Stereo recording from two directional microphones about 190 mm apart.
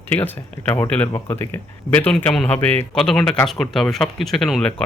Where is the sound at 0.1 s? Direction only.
10° left (ahead or behind).